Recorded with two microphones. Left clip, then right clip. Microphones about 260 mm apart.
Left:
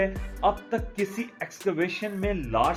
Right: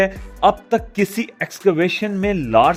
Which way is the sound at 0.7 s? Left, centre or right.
Right.